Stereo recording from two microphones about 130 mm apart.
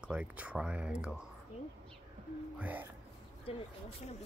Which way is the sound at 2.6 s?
10° right (ahead or behind).